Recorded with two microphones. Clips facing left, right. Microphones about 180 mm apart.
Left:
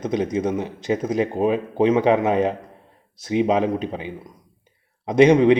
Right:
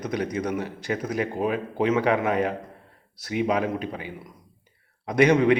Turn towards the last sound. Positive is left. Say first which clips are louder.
# left 5 dB
turn(degrees=20)  # may be behind; listen again after turning